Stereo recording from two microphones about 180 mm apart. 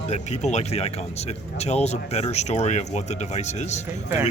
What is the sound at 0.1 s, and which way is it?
Speech, 40° left (ahead or behind).